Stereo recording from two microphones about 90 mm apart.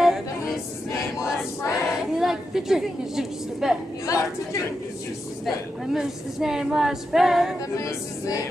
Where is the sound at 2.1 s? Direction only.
5° right (ahead or behind).